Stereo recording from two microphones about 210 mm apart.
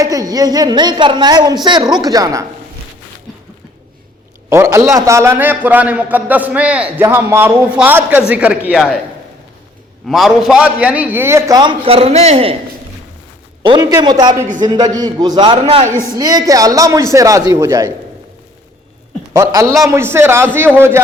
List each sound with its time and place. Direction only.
0.0 s a woman's voice: 15° right (ahead or behind)
4.4 s a man's voice: 15° right (ahead or behind)
10.1 s a man's voice: centre (ahead or behind); by 12.5 s 30° right (ahead or behind)
13.6 s a woman's voice: 20° right (ahead or behind)
14.4 s speech: 40° right (ahead or behind)
14.9 s a woman's voice: 20° right (ahead or behind)
19.3 s a man's voice: 15° right (ahead or behind)